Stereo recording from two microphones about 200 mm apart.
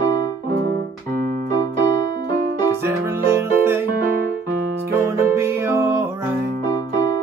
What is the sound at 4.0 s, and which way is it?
Keyboard, 45° right (ahead or behind).